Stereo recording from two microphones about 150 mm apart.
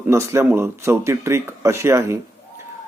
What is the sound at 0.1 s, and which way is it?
Speech, 20° right (ahead or behind).